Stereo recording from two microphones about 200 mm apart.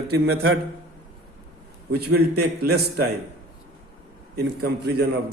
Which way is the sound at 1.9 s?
55° right (ahead or behind).